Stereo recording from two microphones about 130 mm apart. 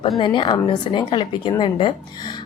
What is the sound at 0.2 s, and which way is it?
A woman's voice, 40° left (ahead or behind).